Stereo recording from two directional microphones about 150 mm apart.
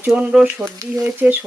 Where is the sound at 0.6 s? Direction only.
15° right (ahead or behind).